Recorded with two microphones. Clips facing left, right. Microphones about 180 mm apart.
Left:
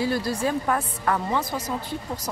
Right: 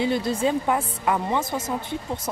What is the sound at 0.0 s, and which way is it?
A woman's voice, 20° right (ahead or behind).